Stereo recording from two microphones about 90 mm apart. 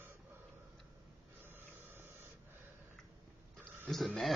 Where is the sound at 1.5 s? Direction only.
25° right (ahead or behind).